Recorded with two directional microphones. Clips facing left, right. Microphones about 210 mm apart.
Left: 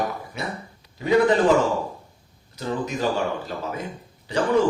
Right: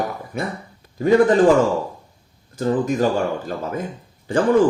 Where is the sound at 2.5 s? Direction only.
50° right (ahead or behind).